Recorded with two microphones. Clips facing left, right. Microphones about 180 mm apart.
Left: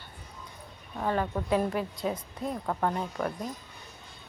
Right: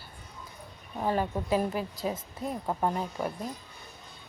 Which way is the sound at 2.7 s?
15° right (ahead or behind).